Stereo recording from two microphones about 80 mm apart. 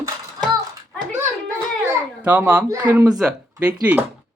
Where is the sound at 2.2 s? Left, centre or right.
Centre.